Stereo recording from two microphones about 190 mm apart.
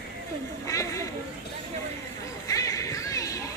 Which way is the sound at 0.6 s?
15° left (ahead or behind).